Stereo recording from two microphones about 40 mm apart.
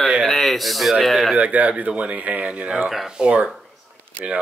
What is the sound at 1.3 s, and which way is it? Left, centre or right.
Speech, right.